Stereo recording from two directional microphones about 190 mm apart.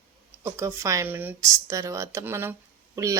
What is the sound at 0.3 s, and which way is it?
Speech, 15° right (ahead or behind).